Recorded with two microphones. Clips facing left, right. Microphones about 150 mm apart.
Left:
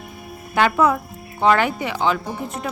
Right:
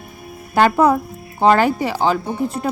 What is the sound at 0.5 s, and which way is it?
A woman's voice, 35° right (ahead or behind).